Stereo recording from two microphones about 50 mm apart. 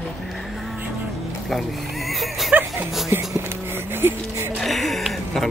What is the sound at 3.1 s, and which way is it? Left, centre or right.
Speech, right.